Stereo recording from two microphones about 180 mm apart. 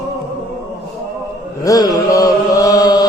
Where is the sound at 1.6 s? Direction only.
20° left (ahead or behind).